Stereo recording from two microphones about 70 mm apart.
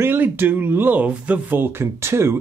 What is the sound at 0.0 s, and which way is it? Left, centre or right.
Speech, right.